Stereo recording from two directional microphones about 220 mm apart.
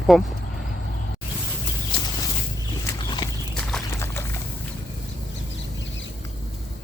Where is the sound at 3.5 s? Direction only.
5° left (ahead or behind).